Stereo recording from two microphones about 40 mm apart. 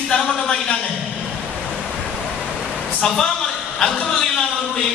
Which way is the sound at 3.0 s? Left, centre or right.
Centre.